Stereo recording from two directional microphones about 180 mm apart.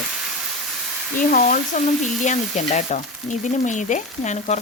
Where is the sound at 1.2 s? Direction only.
45° left (ahead or behind).